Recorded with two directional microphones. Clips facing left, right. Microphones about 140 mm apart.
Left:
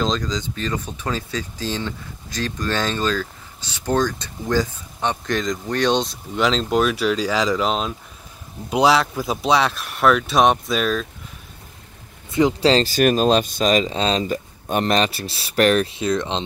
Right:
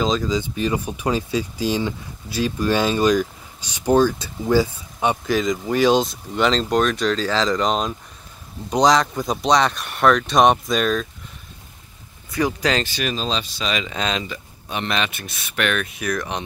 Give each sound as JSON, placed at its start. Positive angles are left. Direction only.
{"t": 0.0, "sound": "speech", "side_deg": -5}
{"t": 12.3, "sound": "speech", "side_deg": 25}